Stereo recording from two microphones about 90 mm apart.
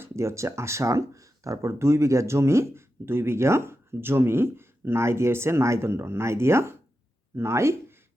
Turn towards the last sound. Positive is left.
turn(degrees=-30)  # may be behind; listen again after turning